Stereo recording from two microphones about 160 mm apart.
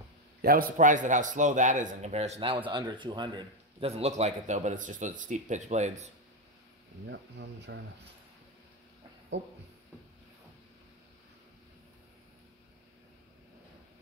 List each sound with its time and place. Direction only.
0.4 s a man's voice: 65° right (ahead or behind); by 2.5 s 40° right (ahead or behind)
2.7 s a man's voice: 30° right (ahead or behind); by 6.0 s 45° right (ahead or behind)
7.1 s speech: 90° right